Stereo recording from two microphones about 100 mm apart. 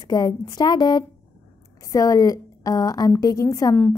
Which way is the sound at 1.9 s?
35° left (ahead or behind).